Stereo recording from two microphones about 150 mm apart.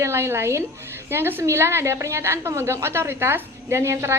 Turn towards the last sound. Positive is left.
turn(degrees=-15)  # may be behind; listen again after turning